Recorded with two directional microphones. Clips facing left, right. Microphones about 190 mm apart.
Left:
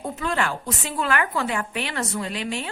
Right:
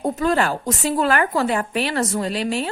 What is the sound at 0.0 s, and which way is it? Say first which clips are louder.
A woman's voice: right 6 dB; 40° right (ahead or behind).